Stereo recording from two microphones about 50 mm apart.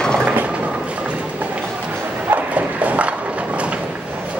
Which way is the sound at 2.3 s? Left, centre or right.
Right.